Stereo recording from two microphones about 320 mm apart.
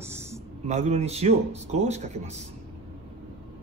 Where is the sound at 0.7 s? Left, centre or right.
Right.